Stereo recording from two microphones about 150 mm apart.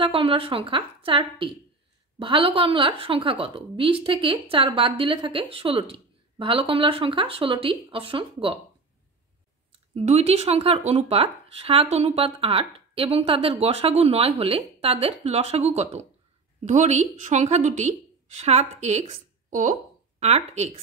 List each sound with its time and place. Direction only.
0.0 s a woman's voice: 35° right (ahead or behind)
9.9 s a woman's voice: 45° right (ahead or behind)